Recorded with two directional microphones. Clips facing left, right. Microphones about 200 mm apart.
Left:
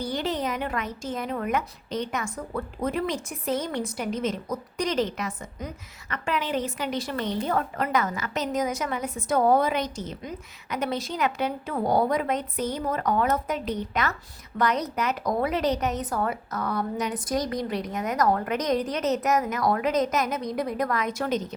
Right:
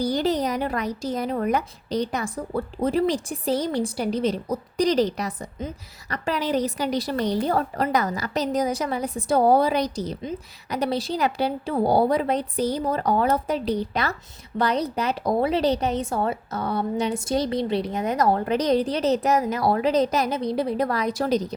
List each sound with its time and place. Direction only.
0.0 s a woman's voice: 35° right (ahead or behind)